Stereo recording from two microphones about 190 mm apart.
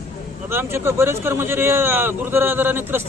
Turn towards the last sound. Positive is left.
turn(degrees=-10)  # may be behind; listen again after turning